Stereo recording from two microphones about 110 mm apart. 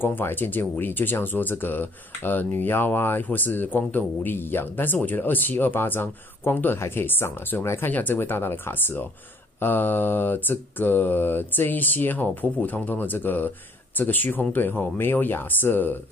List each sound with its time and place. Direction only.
0.0 s mantra: 20° left (ahead or behind)
2.6 s speech: 20° left (ahead or behind)
9.6 s mantra: 15° left (ahead or behind)